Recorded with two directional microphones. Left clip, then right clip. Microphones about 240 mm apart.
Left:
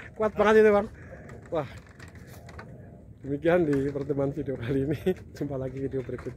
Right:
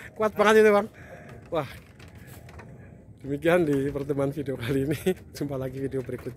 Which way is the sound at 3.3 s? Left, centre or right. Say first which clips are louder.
Right 1 dB; centre.